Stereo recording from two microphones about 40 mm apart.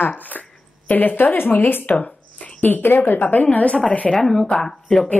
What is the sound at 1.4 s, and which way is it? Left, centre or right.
Speech, left.